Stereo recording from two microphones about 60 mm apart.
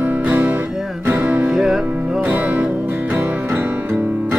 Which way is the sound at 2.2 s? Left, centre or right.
Right.